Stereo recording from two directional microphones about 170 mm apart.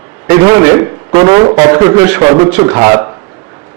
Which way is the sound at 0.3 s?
20° right (ahead or behind).